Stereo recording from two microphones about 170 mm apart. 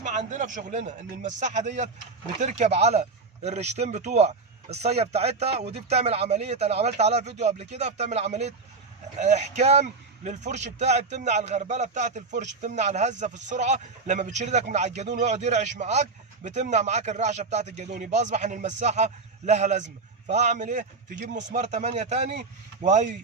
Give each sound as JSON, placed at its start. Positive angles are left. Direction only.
{"t": 0.0, "sound": "a man's voice", "side_deg": -45}